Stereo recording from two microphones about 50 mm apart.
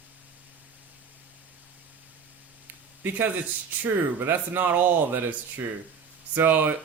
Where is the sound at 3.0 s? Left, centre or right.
Right.